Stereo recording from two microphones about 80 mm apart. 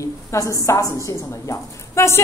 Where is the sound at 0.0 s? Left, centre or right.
Left.